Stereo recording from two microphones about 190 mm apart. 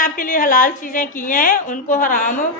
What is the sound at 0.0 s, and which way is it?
A woman's voice, 45° left (ahead or behind).